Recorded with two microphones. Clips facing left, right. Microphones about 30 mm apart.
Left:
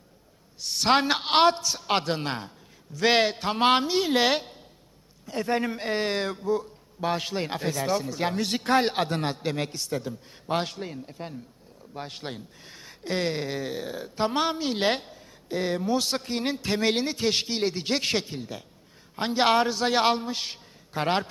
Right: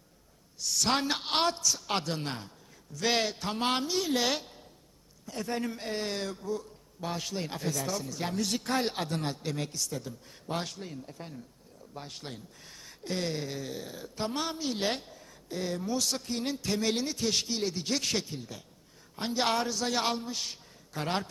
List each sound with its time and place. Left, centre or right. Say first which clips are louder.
0.6 s speech: left 6 dB; left